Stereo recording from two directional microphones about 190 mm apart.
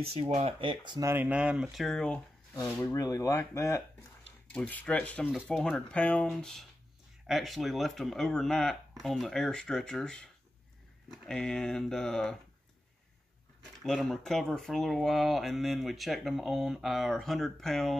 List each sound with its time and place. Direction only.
0.0 s speech: 30° right (ahead or behind)
1.1 s speech: 10° right (ahead or behind)
2.5 s speech: 15° left (ahead or behind)
13.8 s speech: centre (ahead or behind)